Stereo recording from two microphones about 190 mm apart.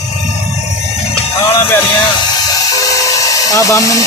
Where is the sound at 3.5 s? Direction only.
15° left (ahead or behind).